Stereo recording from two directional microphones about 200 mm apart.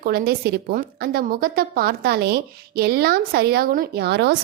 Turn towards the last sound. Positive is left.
turn(degrees=-55)  # may be behind; listen again after turning